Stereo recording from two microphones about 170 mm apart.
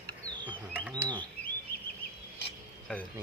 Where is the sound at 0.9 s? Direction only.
25° right (ahead or behind).